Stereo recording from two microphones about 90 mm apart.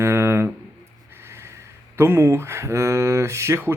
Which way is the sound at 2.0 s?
30° right (ahead or behind).